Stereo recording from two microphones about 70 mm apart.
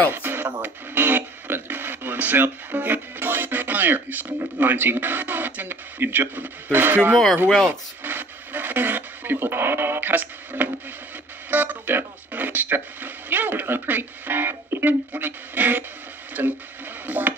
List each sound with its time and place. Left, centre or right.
0.1 s radio: right
0.6 s speech: right
7.4 s speech: centre
8.0 s speech: right
16.4 s a sound: right